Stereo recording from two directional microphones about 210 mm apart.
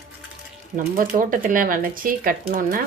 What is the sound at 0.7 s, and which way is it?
Speech, 40° right (ahead or behind).